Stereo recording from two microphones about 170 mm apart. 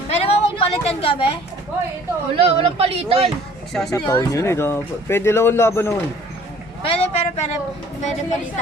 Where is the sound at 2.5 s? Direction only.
35° right (ahead or behind).